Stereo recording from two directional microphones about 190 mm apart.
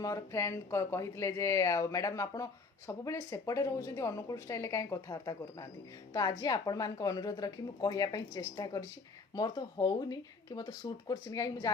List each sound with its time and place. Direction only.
0.0 s a woman's voice: 15° left (ahead or behind)